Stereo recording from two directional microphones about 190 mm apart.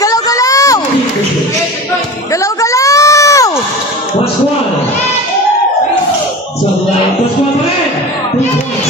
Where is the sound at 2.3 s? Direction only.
15° left (ahead or behind).